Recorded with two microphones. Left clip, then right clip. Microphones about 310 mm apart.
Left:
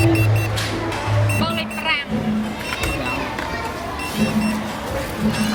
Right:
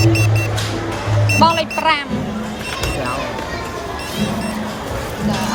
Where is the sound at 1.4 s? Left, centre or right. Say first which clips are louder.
Right 12 dB; centre.